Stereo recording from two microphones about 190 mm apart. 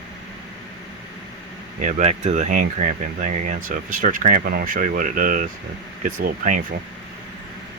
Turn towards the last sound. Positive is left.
turn(degrees=-40)  # may be behind; listen again after turning